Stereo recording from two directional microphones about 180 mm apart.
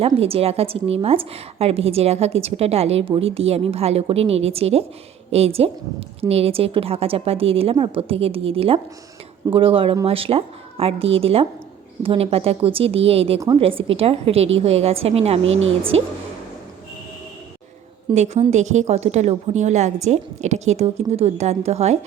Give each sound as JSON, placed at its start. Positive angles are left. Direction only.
{"t": 0.0, "sound": "a woman's voice", "side_deg": -30}
{"t": 18.1, "sound": "a woman's voice", "side_deg": -40}